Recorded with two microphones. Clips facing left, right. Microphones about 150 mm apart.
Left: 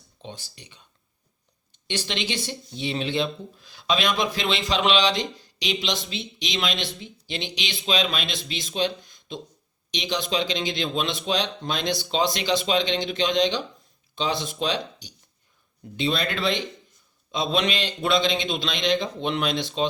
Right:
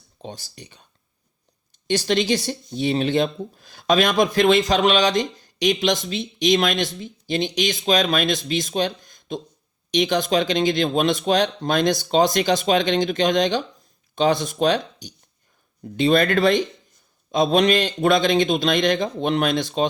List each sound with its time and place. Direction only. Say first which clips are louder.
0.2 s speech: right 4 dB; 40° right (ahead or behind)
1.9 s speech: right 9 dB; 40° right (ahead or behind)